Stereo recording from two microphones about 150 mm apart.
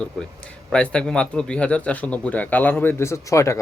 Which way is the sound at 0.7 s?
5° left (ahead or behind).